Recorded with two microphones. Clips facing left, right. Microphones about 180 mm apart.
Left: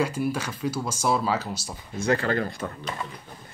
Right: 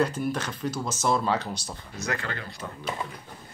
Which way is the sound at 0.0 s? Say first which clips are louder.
Even; 10° left (ahead or behind).